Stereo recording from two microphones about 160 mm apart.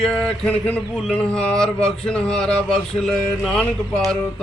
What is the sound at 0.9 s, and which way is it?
Speech, 5° right (ahead or behind).